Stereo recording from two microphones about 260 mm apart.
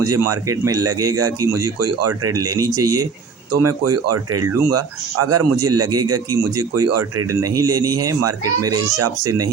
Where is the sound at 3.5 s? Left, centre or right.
Right.